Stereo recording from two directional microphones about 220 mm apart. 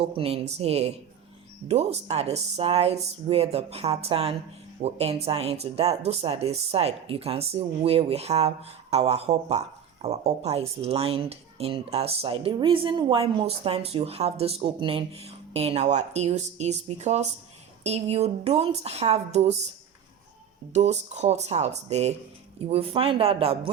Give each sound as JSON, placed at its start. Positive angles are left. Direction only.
{"t": 0.2, "sound": "speech", "side_deg": -25}
{"t": 20.7, "sound": "speech", "side_deg": -30}